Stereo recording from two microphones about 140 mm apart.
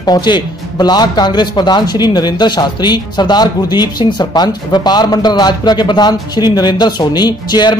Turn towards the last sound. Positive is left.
turn(degrees=30)  # may be behind; listen again after turning